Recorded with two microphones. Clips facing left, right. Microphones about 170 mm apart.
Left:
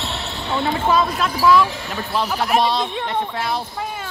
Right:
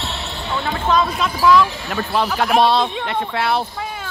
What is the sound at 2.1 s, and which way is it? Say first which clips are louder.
Speech: right 2 dB; 65° right (ahead or behind).